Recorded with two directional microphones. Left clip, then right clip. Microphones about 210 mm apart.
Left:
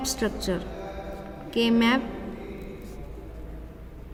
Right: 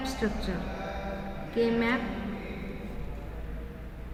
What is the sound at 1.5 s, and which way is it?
Speech, 55° left (ahead or behind).